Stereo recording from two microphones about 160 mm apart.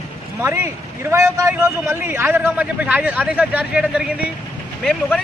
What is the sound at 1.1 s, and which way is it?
A man's voice, 20° right (ahead or behind).